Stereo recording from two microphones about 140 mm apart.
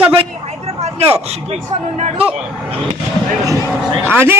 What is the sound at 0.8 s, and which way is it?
A man's voice, 45° right (ahead or behind).